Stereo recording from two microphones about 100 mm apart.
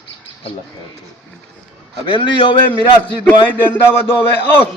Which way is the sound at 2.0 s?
55° left (ahead or behind).